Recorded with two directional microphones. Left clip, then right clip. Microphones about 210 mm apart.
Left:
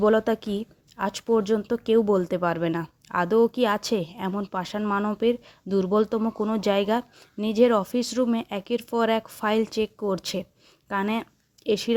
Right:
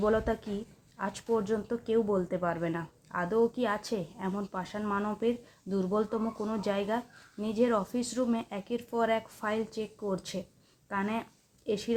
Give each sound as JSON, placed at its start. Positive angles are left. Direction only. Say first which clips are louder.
{"t": 0.0, "sound": "a woman's voice", "louder": "left 7 dB", "side_deg": 35}